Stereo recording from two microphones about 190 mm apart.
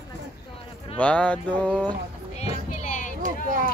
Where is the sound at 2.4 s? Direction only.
40° left (ahead or behind).